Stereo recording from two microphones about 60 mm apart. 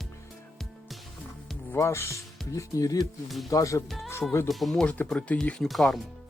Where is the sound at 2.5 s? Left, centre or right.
Left.